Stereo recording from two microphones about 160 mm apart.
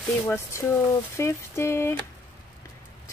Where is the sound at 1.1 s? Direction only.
15° left (ahead or behind).